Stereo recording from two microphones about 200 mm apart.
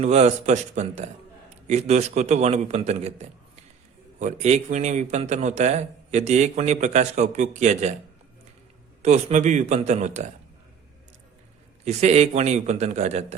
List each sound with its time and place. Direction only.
0.0 s a man's voice: 35° right (ahead or behind)
9.0 s a man's voice: 35° right (ahead or behind)
11.9 s a man's voice: 35° right (ahead or behind)